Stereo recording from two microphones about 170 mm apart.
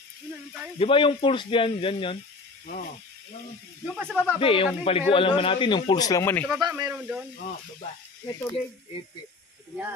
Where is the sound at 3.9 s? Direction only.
5° left (ahead or behind).